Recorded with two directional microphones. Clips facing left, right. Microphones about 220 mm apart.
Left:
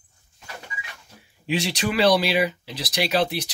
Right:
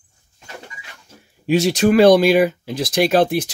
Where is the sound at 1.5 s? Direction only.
45° right (ahead or behind).